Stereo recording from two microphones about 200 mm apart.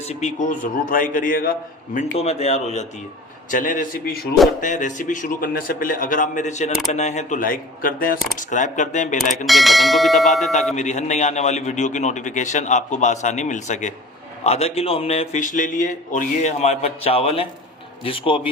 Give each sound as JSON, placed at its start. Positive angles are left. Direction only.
{"t": 0.0, "sound": "a man's voice", "side_deg": 35}
{"t": 4.6, "sound": "a man's voice", "side_deg": 40}
{"t": 9.5, "sound": "speech", "side_deg": 0}
{"t": 10.8, "sound": "a man's voice", "side_deg": 35}